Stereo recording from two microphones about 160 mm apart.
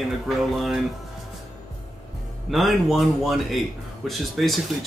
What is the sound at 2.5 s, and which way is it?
Speech, centre (ahead or behind).